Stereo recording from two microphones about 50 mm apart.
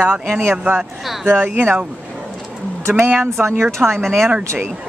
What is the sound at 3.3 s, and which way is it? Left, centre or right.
Speech, right.